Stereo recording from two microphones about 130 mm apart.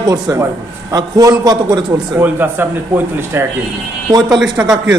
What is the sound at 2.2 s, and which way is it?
Speech, 15° right (ahead or behind).